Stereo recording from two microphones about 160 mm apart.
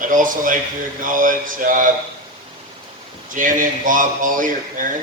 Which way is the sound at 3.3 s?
55° right (ahead or behind).